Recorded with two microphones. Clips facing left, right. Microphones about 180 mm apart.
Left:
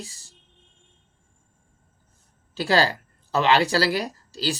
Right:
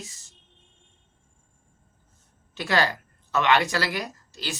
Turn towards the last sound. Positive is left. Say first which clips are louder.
# left 7 dB
turn(degrees=35)  # may be behind; listen again after turning